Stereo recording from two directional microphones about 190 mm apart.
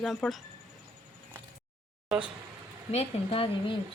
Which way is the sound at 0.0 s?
Centre (ahead or behind).